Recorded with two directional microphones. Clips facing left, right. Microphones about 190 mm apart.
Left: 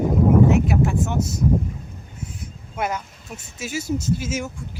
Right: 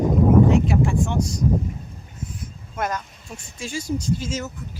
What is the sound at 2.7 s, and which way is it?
Speech, 10° left (ahead or behind).